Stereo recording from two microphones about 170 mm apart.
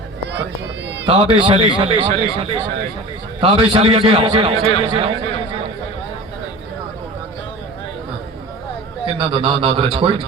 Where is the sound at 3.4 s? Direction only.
30° right (ahead or behind).